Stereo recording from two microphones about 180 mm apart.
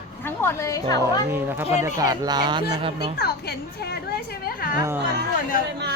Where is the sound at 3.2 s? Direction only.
60° left (ahead or behind).